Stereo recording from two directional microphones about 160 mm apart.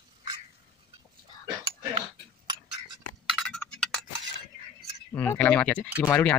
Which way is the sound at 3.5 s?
5° left (ahead or behind).